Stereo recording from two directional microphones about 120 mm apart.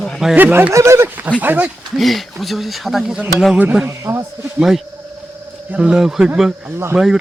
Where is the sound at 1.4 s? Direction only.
15° right (ahead or behind).